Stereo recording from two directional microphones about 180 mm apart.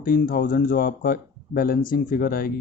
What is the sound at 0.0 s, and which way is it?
Speech, 50° left (ahead or behind).